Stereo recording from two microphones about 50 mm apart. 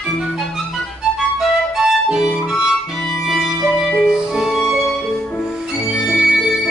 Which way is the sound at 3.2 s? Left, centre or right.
Centre.